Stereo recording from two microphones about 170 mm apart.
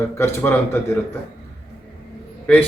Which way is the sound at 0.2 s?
15° left (ahead or behind).